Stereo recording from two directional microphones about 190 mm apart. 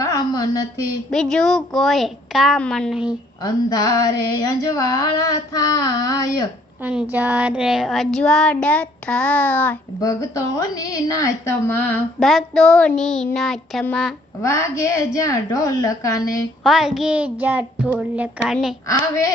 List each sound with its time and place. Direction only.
0.0 s a sound: 20° left (ahead or behind)
1.1 s speech: 5° left (ahead or behind)
3.1 s female singing: 20° left (ahead or behind)
6.8 s speech: 10° right (ahead or behind)
14.4 s a woman's voice: 15° left (ahead or behind)
16.6 s speech: centre (ahead or behind)
18.9 s a woman's voice: 15° left (ahead or behind)